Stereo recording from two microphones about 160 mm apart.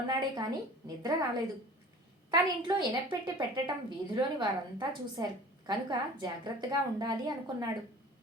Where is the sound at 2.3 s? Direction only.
30° right (ahead or behind).